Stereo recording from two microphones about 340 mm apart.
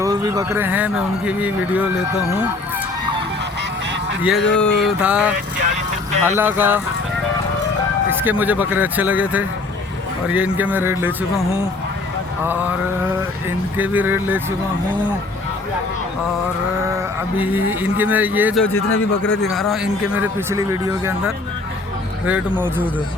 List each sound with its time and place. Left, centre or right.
0.0 s a man's voice: centre
4.2 s a man's voice: centre
8.2 s a man's voice: centre
12.5 s a man's voice: centre
17.3 s a man's voice: centre
18.8 s a man's voice: left
19.3 s a man's voice: centre